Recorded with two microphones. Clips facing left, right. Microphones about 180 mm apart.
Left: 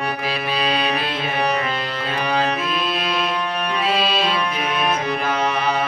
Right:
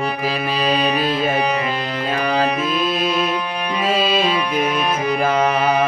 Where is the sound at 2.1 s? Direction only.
45° right (ahead or behind).